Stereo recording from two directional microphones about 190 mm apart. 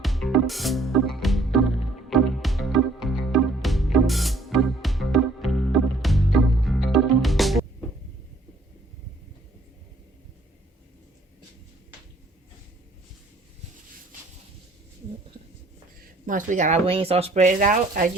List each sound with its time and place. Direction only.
0.0 s music: centre (ahead or behind)
16.2 s speech: 45° right (ahead or behind)